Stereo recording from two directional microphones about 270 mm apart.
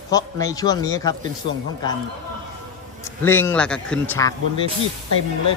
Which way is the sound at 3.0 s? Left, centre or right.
Centre.